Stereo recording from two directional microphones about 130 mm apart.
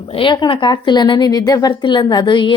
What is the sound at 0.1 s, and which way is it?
A woman's voice, 40° left (ahead or behind).